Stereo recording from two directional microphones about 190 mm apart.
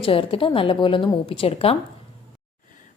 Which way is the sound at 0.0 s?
30° left (ahead or behind).